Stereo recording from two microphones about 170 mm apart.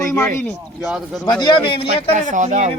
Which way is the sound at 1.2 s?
25° left (ahead or behind).